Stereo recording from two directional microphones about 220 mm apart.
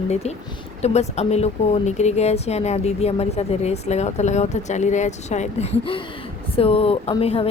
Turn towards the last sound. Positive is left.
turn(degrees=25)  # may be behind; listen again after turning